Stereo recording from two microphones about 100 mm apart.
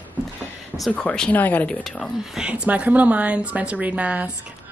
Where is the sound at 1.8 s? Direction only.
5° left (ahead or behind).